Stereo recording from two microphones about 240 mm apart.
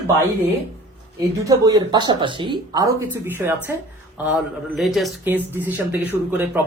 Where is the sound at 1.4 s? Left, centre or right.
Centre.